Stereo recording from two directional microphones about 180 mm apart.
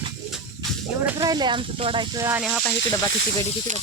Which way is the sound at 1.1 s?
25° right (ahead or behind).